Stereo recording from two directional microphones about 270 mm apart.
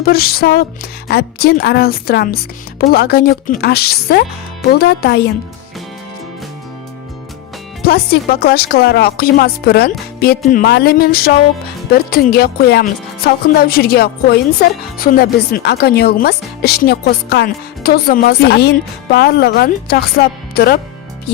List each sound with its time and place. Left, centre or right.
0.0 s speech: left
7.9 s speech: left
21.3 s music: left